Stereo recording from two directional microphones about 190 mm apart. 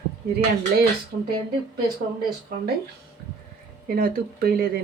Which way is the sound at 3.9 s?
50° right (ahead or behind).